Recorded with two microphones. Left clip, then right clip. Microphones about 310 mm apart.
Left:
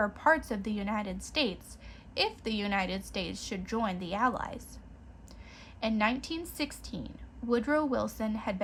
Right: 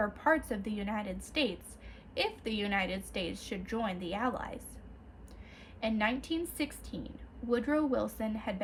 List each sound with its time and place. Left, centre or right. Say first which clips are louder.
0.0 s a woman's voice: left 3 dB; centre
5.8 s a woman's voice: left 2 dB; centre